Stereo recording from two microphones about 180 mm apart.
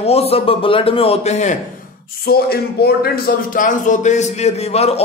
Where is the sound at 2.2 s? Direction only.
60° left (ahead or behind).